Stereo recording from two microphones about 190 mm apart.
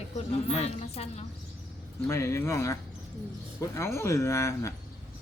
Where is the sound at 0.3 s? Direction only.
30° left (ahead or behind).